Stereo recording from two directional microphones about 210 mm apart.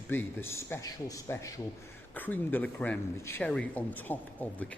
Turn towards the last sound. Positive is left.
turn(degrees=10)  # may be behind; listen again after turning